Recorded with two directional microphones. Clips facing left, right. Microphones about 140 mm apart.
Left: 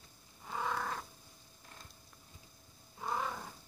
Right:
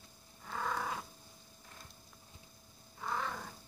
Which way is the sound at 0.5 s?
10° left (ahead or behind).